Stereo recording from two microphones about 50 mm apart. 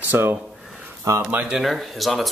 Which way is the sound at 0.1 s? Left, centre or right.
Right.